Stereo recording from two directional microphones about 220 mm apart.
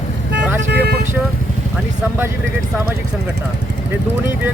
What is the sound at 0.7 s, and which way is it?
Speech, 50° right (ahead or behind).